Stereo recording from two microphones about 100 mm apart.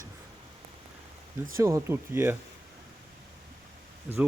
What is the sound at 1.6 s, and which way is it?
Speech, 30° right (ahead or behind).